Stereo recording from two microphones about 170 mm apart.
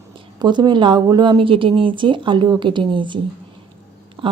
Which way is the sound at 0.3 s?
25° right (ahead or behind).